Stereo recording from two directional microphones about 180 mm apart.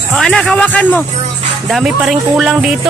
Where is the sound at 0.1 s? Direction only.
5° left (ahead or behind).